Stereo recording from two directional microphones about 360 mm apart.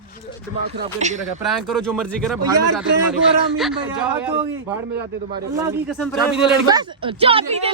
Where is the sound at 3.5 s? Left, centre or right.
Centre.